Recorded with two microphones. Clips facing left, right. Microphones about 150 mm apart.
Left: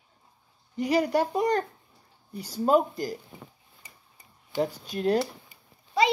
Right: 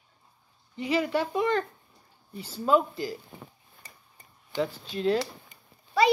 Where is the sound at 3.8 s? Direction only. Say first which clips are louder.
Right 1 dB; 10° left (ahead or behind).